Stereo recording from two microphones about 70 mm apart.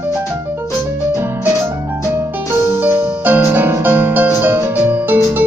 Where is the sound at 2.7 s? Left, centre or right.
Right.